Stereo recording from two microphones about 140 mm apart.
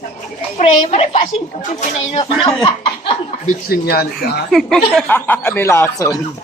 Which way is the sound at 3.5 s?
90° left.